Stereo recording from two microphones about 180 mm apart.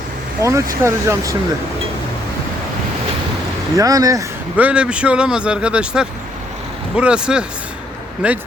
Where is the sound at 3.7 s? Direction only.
20° right (ahead or behind).